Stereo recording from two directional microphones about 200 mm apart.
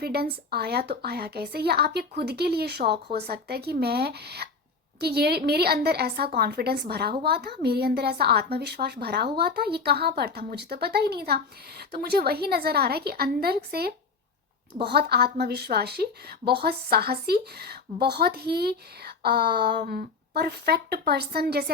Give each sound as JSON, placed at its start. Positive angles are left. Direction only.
{"t": 0.0, "sound": "a woman's voice", "side_deg": -50}